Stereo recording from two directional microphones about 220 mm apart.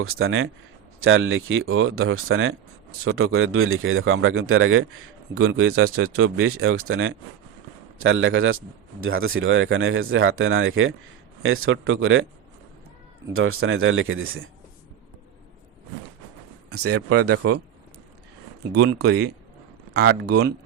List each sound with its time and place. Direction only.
0.0 s speech: 65° right (ahead or behind)
13.3 s speech: 70° right (ahead or behind)
16.8 s speech: 90° right
18.7 s speech: 50° right (ahead or behind)